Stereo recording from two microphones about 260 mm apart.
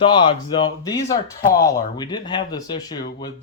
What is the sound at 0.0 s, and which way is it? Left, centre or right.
Speech, centre.